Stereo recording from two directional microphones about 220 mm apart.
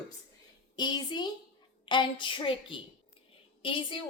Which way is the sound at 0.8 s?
20° left (ahead or behind).